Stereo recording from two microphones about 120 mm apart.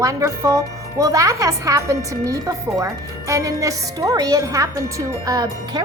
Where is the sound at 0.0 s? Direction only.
30° right (ahead or behind).